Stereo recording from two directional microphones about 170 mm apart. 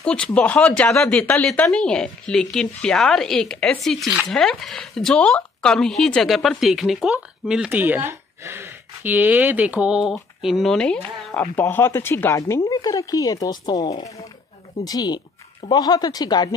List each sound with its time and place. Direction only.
0.0 s speech: 5° left (ahead or behind); by 16.4 s 25° left (ahead or behind)